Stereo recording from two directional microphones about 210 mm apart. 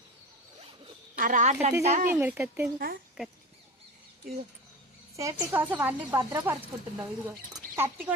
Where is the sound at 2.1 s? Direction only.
10° right (ahead or behind).